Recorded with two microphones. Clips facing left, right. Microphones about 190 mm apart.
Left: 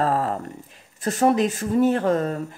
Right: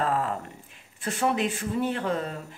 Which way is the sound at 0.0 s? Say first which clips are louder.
Left 4 dB; 40° left (ahead or behind).